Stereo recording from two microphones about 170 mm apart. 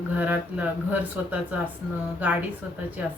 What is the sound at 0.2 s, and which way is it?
Speech, 10° right (ahead or behind).